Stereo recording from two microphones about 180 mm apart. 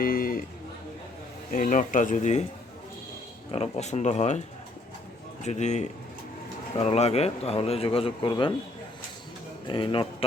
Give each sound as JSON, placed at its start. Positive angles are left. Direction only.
{"t": 0.0, "sound": "a sound", "side_deg": 55}
{"t": 1.5, "sound": "speech", "side_deg": 50}
{"t": 3.5, "sound": "speech", "side_deg": 35}
{"t": 9.6, "sound": "speech", "side_deg": 30}